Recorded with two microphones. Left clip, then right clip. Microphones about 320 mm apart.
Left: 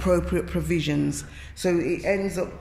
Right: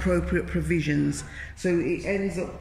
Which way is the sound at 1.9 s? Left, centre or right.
Left.